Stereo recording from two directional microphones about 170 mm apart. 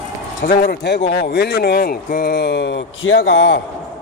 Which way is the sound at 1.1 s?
75° left (ahead or behind).